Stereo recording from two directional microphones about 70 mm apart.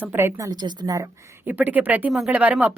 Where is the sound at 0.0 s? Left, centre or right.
Right.